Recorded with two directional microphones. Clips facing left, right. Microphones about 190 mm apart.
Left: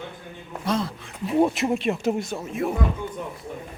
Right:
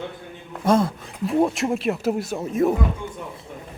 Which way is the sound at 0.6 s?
50° right (ahead or behind).